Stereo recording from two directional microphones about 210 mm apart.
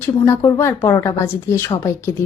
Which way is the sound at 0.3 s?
15° left (ahead or behind).